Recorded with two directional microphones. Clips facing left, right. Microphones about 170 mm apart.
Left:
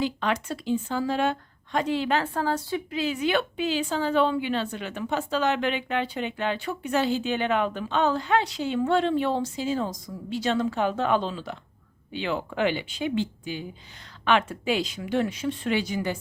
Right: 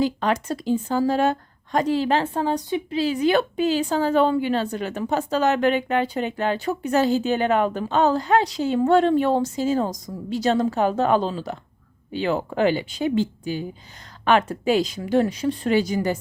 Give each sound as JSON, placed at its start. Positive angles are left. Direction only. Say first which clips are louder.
{"t": 0.0, "sound": "a woman's voice", "louder": "right 5 dB", "side_deg": -40}
{"t": 2.9, "sound": "a woman's voice", "louder": "right 6 dB", "side_deg": -35}